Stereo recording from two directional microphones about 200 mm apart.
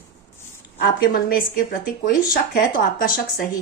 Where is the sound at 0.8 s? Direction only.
50° left (ahead or behind).